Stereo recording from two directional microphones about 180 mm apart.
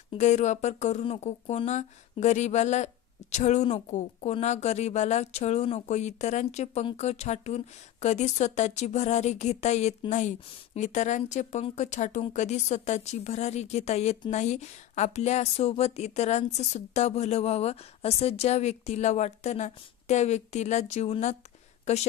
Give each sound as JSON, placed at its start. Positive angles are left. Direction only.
{"t": 0.1, "sound": "a woman's voice", "side_deg": 40}